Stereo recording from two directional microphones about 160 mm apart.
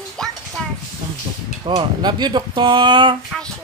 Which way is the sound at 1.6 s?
30° right (ahead or behind).